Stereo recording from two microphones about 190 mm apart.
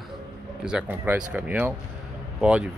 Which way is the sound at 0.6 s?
5° right (ahead or behind).